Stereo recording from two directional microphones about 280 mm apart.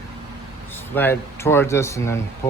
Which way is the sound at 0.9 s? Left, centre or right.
Centre.